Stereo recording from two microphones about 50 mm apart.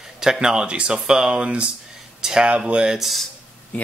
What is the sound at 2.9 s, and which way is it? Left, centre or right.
Speech, centre.